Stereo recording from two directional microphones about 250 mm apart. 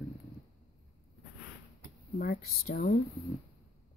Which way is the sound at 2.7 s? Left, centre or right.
Left.